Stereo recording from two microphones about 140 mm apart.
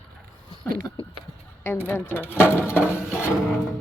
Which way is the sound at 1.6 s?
10° left (ahead or behind).